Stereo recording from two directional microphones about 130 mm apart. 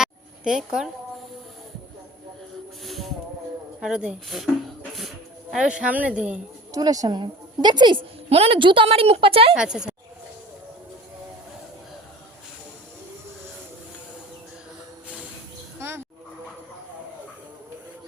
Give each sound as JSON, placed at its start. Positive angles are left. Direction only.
{"t": 0.0, "sound": "a sound", "side_deg": -5}
{"t": 2.8, "sound": "music", "side_deg": 0}
{"t": 3.8, "sound": "speech", "side_deg": -5}
{"t": 4.9, "sound": "music", "side_deg": 0}
{"t": 6.7, "sound": "a woman's voice", "side_deg": -30}
{"t": 9.6, "sound": "speech", "side_deg": -5}